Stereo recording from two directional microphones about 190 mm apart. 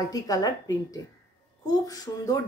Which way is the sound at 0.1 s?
20° left (ahead or behind).